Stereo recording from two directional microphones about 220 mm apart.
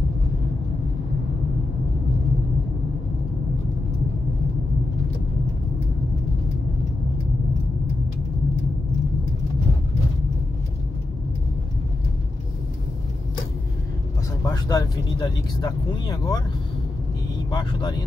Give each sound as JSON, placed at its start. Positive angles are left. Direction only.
{"t": 14.4, "sound": "speech", "side_deg": 15}
{"t": 17.5, "sound": "speech", "side_deg": 20}